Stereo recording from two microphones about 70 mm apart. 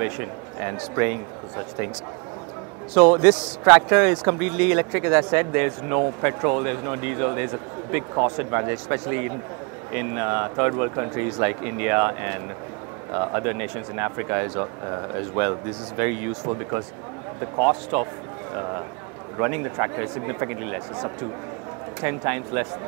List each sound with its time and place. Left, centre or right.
0.0 s a man's voice: right
2.9 s a man's voice: right